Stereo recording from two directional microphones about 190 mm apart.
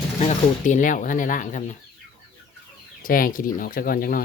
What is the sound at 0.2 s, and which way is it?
Speech, 40° left (ahead or behind).